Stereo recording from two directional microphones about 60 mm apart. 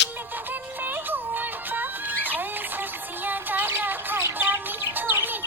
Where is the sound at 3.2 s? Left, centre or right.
Right.